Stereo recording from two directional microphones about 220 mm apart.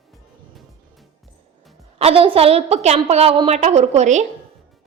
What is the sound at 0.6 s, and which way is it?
Music, centre (ahead or behind).